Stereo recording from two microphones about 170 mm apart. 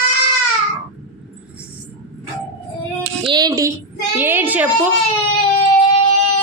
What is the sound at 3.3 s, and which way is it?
A child's voice, 20° right (ahead or behind).